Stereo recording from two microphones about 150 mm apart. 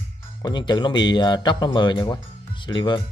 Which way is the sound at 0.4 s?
30° left (ahead or behind).